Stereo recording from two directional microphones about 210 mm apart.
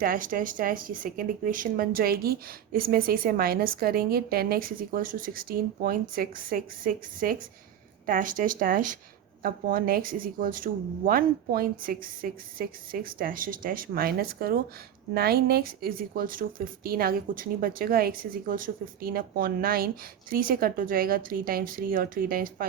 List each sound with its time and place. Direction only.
0.0 s speech: 40° right (ahead or behind)